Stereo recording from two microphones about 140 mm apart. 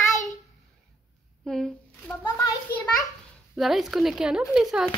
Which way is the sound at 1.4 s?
Centre (ahead or behind).